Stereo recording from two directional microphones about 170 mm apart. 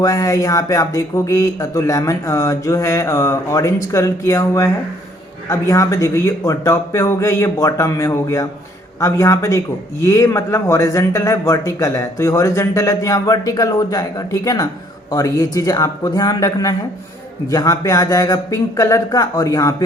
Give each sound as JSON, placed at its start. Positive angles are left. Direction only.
{"t": 0.0, "sound": "a man's voice", "side_deg": 20}